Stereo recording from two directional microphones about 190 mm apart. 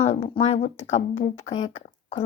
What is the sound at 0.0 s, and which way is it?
Speech, 30° left (ahead or behind).